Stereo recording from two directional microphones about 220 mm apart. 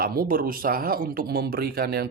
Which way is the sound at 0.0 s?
40° right (ahead or behind).